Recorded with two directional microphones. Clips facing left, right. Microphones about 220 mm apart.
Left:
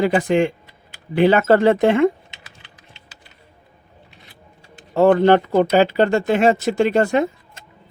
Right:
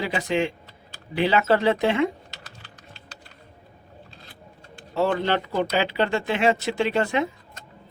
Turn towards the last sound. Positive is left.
turn(degrees=45)  # may be behind; listen again after turning